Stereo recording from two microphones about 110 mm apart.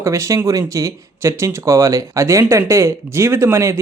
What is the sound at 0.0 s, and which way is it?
Speech, 25° right (ahead or behind).